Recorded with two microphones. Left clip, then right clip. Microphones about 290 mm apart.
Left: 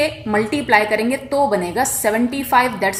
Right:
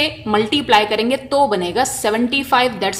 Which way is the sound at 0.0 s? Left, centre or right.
Right.